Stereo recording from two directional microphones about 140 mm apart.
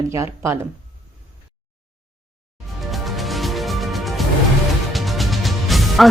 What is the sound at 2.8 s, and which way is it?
Music, centre (ahead or behind).